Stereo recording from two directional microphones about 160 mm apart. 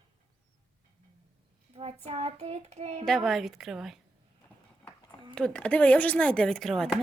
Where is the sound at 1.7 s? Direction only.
35° right (ahead or behind).